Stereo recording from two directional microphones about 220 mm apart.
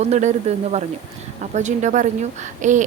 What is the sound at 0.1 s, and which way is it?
A woman's voice, 30° right (ahead or behind).